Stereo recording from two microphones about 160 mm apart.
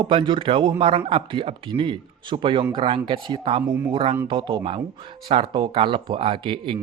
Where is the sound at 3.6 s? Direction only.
10° right (ahead or behind).